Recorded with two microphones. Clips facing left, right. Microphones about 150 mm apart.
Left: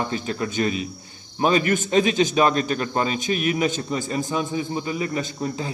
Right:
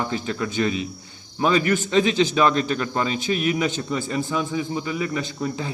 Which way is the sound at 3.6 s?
45° left (ahead or behind).